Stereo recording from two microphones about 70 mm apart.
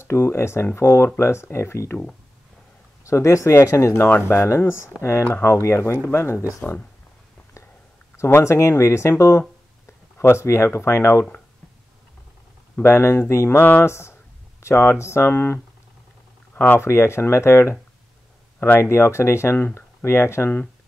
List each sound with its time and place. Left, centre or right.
0.0 s speech: left
3.0 s speech: left
8.3 s speech: left
12.8 s speech: left
16.8 s speech: left
18.8 s speech: left